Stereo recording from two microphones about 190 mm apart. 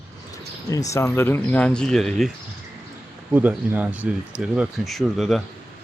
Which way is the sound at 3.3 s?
10° right (ahead or behind).